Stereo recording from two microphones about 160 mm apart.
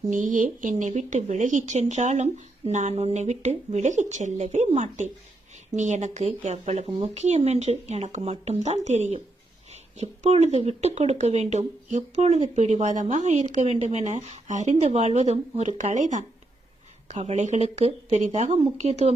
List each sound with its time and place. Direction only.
0.1 s speech: 55° right (ahead or behind)